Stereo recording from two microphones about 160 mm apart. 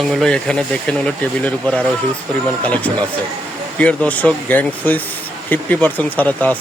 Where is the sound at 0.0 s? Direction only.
Centre (ahead or behind).